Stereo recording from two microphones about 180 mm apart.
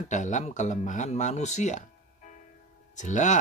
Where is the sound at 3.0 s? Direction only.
40° left (ahead or behind).